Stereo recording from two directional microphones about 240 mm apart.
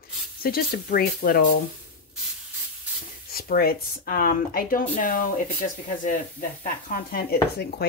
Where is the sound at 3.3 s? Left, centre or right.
Left.